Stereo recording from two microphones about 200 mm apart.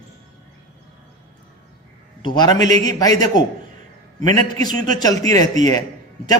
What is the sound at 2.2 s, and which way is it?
A man's voice, 20° left (ahead or behind).